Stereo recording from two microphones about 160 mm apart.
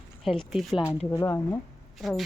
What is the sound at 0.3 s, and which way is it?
Speech, centre (ahead or behind).